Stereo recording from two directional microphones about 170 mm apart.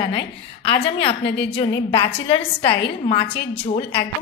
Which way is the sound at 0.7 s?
30° left (ahead or behind).